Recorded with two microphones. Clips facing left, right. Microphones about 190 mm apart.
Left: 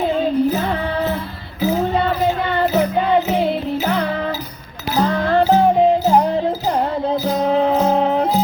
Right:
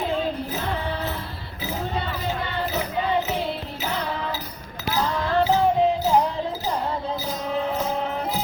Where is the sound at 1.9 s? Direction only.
70° left (ahead or behind); by 8.3 s 90° left.